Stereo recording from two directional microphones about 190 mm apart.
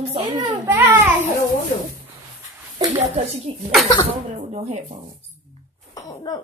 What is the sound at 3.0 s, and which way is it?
Speech, 35° right (ahead or behind).